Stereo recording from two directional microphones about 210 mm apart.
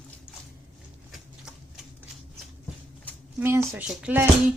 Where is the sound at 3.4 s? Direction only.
10° right (ahead or behind).